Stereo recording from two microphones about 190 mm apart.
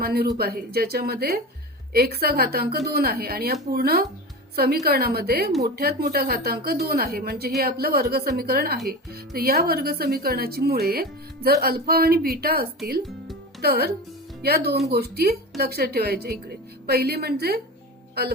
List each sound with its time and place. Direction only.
0.0 s a woman's voice: 55° right (ahead or behind)